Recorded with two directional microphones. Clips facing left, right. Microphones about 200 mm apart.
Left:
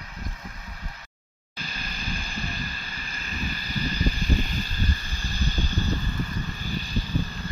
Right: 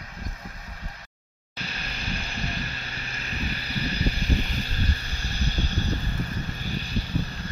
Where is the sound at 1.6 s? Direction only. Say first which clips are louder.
Right 1 dB; 65° right (ahead or behind).